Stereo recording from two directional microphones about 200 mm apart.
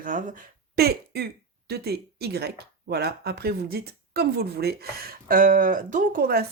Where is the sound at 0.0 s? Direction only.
40° right (ahead or behind).